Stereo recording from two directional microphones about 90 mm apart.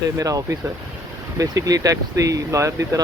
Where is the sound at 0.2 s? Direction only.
40° right (ahead or behind).